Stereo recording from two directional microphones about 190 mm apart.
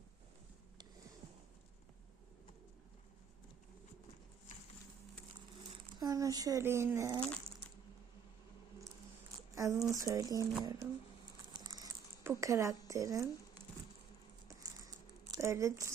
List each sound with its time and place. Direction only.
4.5 s patter: 40° left (ahead or behind)
6.0 s speech: 20° right (ahead or behind)
9.6 s speech: 15° right (ahead or behind)
11.5 s patter: 20° right (ahead or behind)
12.9 s speech: 15° right (ahead or behind)
14.4 s crumpling: 20° right (ahead or behind)